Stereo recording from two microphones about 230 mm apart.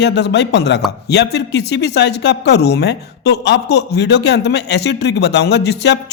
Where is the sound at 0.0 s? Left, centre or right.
Left.